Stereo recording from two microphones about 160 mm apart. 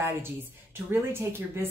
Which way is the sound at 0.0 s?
15° right (ahead or behind).